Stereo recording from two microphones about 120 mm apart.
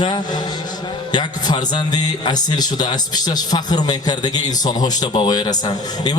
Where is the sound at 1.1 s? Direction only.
35° left (ahead or behind).